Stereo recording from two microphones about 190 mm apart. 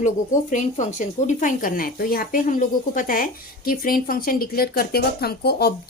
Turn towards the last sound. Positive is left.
turn(degrees=55)  # may be behind; listen again after turning